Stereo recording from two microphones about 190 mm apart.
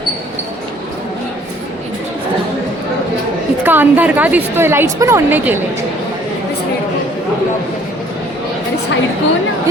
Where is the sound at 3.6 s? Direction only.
10° right (ahead or behind).